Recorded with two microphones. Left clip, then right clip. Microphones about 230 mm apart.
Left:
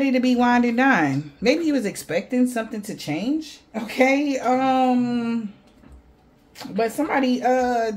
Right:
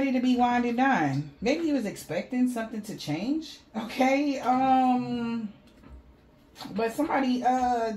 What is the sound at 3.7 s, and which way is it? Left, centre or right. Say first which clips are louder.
Speech: left 6 dB; left.